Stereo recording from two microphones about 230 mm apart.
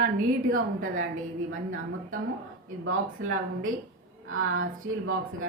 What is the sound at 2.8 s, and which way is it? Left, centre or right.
A woman's voice, right.